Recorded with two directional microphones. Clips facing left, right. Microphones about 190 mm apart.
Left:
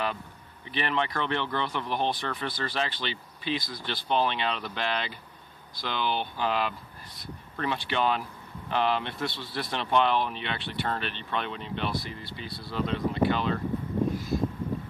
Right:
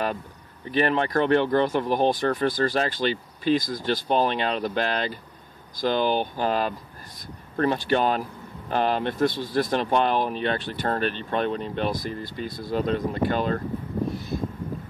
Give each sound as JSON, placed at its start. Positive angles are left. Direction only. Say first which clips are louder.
{"t": 0.7, "sound": "speech", "louder": "right 7 dB", "side_deg": -45}